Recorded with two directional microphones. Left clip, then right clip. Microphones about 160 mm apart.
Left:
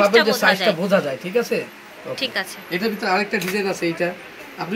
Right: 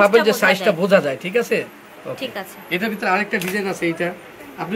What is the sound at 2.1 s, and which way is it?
Speech, 15° right (ahead or behind).